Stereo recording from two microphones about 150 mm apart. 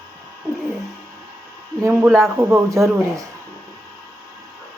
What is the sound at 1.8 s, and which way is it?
A man's voice, 10° right (ahead or behind).